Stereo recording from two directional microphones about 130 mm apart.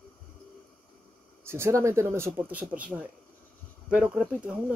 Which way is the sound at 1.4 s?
20° right (ahead or behind).